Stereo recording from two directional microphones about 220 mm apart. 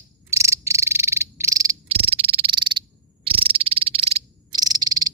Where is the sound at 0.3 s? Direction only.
15° right (ahead or behind).